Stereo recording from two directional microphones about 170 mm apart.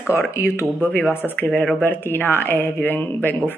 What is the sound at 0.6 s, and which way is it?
Speech, 10° left (ahead or behind).